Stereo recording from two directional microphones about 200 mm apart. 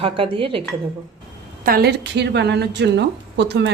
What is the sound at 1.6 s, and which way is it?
A woman's voice, 50° right (ahead or behind).